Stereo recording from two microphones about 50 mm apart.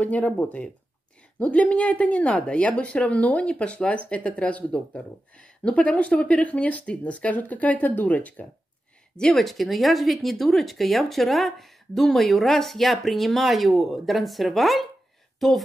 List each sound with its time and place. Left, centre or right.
0.0 s speech: left
9.1 s speech: centre
9.4 s speech: centre
15.3 s a sound: centre